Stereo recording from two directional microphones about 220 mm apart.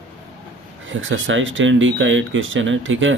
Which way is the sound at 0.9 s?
60° right (ahead or behind).